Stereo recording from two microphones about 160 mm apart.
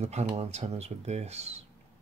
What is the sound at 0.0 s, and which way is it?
Speech, 40° right (ahead or behind).